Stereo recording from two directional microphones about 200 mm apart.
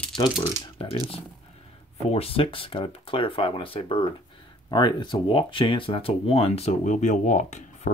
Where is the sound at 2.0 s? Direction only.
30° left (ahead or behind).